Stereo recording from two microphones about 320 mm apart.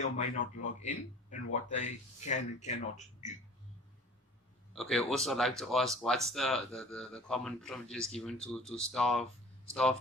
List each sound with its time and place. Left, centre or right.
0.0 s speech: left
4.7 s speech: centre